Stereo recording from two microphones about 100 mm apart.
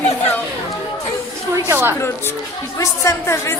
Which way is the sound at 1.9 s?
25° left (ahead or behind).